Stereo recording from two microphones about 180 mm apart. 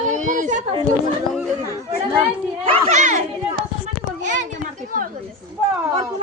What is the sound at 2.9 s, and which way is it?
Children playing, 40° right (ahead or behind).